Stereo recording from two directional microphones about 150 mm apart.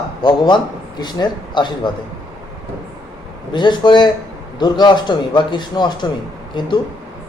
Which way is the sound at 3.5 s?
30° left (ahead or behind).